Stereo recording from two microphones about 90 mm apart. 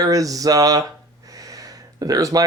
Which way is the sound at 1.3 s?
40° right (ahead or behind).